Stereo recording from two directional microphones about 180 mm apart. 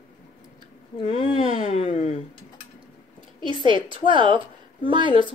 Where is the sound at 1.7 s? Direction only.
45° left (ahead or behind).